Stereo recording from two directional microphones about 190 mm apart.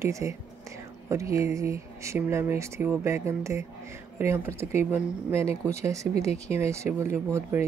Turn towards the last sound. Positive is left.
turn(degrees=-10)  # may be behind; listen again after turning